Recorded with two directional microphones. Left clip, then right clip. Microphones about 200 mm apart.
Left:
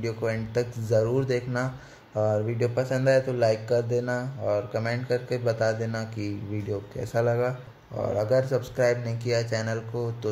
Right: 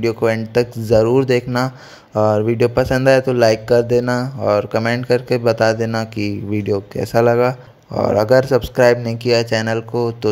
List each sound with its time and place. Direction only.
0.0 s speech: 40° right (ahead or behind)